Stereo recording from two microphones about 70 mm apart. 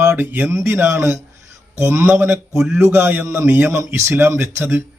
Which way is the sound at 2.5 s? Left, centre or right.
Centre.